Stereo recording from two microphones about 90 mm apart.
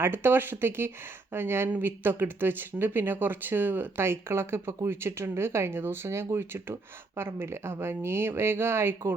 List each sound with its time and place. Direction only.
0.0 s speech: 25° right (ahead or behind)